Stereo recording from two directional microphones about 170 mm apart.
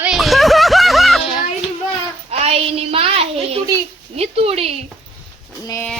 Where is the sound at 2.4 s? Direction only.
40° right (ahead or behind).